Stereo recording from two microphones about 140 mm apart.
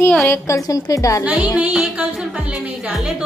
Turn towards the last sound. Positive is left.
turn(degrees=-5)  # may be behind; listen again after turning